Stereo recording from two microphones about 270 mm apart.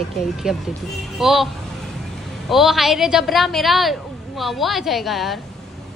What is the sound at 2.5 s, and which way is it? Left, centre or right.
A woman's voice, centre.